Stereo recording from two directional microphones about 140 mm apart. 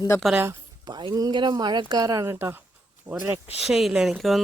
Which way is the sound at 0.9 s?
30° right (ahead or behind).